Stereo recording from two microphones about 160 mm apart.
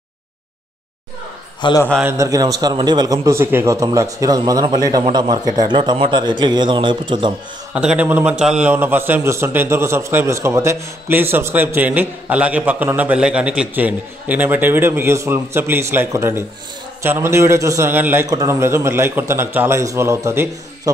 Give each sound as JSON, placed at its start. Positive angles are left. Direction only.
{"t": 1.6, "sound": "a man's voice", "side_deg": 25}
{"t": 2.0, "sound": "a man's voice", "side_deg": -15}
{"t": 7.7, "sound": "a man's voice", "side_deg": -5}